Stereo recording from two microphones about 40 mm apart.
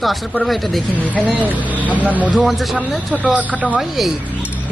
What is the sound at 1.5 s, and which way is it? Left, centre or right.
Speech, right.